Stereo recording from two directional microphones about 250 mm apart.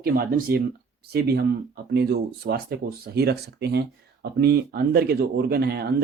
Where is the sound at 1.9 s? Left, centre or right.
Right.